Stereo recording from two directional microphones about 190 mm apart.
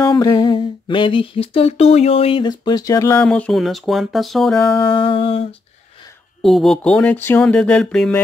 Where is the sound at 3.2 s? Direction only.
5° left (ahead or behind).